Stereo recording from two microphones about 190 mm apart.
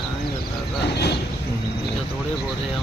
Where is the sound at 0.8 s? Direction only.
60° left (ahead or behind).